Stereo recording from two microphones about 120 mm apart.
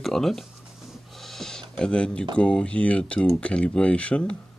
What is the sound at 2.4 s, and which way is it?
Speech, 10° left (ahead or behind).